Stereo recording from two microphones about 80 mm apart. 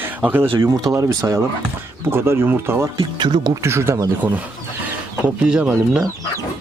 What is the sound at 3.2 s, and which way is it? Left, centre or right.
Speech, right.